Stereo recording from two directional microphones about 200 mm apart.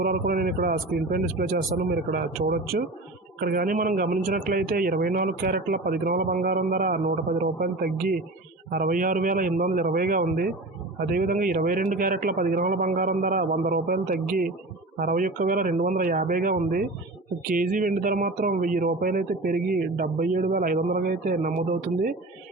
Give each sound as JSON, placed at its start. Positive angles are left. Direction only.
{"t": 0.0, "sound": "speech", "side_deg": -45}